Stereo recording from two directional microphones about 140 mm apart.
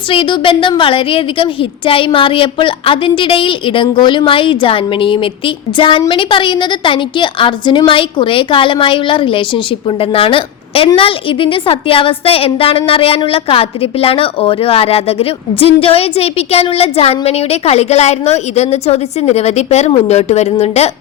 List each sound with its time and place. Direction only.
0.1 s a woman's voice: 40° left (ahead or behind)